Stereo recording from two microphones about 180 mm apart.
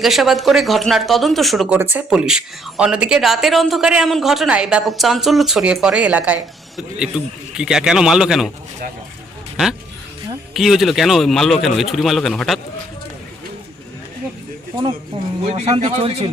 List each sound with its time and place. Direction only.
0.0 s speech: centre (ahead or behind)
1.8 s speech: 10° right (ahead or behind)
10.5 s speech: centre (ahead or behind)
15.5 s a man's voice: 35° right (ahead or behind)